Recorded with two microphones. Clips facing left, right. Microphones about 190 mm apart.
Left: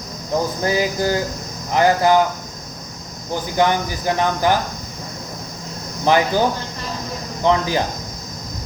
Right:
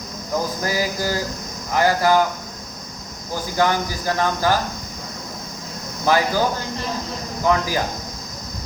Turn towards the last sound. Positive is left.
turn(degrees=25)  # may be behind; listen again after turning